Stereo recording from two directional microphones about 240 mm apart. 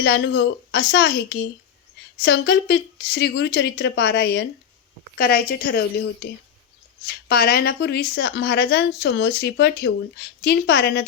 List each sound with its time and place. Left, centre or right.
0.0 s a woman's voice: left